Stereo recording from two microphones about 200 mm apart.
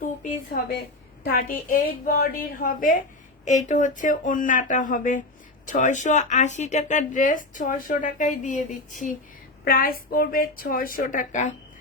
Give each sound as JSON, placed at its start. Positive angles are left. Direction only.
{"t": 0.0, "sound": "a woman's voice", "side_deg": 45}